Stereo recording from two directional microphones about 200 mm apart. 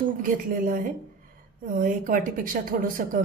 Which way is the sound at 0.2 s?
40° right (ahead or behind).